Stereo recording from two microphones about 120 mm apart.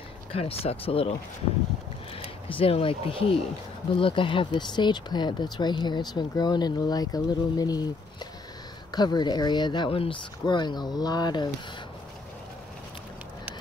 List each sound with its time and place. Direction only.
0.3 s speech: 55° left (ahead or behind)
2.1 s speech: 50° left (ahead or behind); by 11.5 s 35° left (ahead or behind)